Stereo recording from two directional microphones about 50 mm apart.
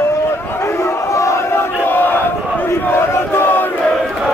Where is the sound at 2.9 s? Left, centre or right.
Left.